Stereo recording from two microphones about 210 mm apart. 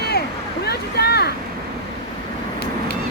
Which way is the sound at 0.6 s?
50° left (ahead or behind).